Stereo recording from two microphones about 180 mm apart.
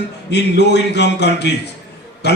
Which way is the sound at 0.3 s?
70° left (ahead or behind).